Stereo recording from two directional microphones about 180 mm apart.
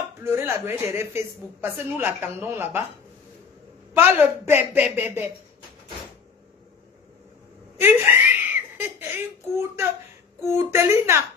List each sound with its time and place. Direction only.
0.2 s speech: 15° right (ahead or behind)
3.9 s speech: 10° right (ahead or behind)
7.8 s giggle: 10° right (ahead or behind)
10.4 s speech: 15° right (ahead or behind)